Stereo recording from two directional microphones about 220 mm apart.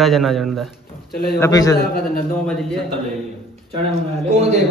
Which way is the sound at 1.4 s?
15° left (ahead or behind).